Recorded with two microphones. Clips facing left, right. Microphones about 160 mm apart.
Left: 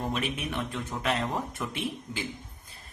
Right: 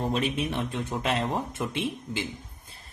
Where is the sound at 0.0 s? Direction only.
30° right (ahead or behind).